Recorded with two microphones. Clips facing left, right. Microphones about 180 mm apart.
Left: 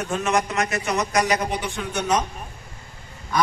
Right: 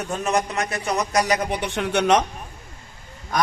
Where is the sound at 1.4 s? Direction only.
65° right (ahead or behind).